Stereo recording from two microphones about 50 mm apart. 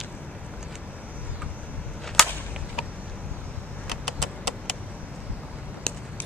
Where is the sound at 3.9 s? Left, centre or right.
Centre.